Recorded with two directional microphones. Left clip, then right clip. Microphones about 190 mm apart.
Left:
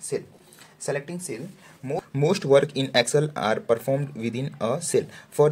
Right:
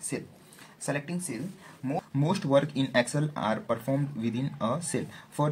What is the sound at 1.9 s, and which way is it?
Speech, 45° left (ahead or behind).